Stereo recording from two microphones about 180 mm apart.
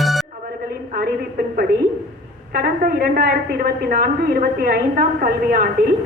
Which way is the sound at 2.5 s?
55° right (ahead or behind).